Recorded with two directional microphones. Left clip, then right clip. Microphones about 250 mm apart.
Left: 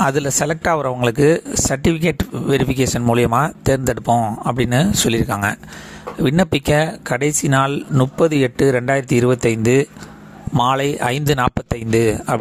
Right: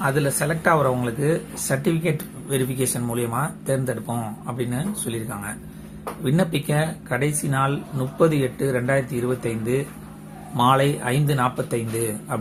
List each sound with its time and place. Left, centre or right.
0.0 s speech: left